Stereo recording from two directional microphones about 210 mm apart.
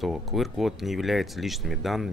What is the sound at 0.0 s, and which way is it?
Speech, centre (ahead or behind).